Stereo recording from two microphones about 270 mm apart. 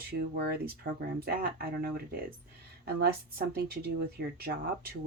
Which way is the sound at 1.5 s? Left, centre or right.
Right.